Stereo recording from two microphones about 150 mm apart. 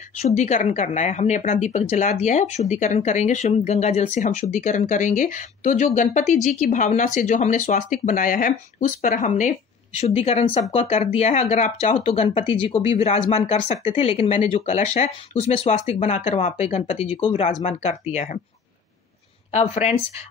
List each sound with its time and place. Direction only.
0.2 s speech: 50° left (ahead or behind)
17.5 s speech: 50° left (ahead or behind)
19.5 s speech: 45° left (ahead or behind)